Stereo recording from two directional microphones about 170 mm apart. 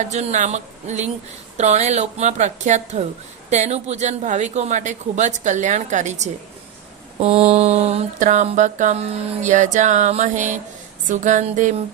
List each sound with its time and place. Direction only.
0.0 s mantra: 45° right (ahead or behind)
1.5 s speech: 40° right (ahead or behind)
3.5 s mantra: 40° right (ahead or behind)